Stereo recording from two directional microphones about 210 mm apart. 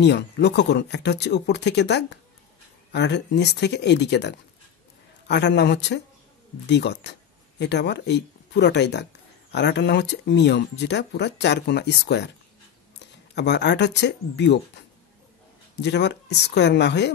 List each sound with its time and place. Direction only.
0.0 s speech: 55° left (ahead or behind)
15.8 s speech: 55° left (ahead or behind)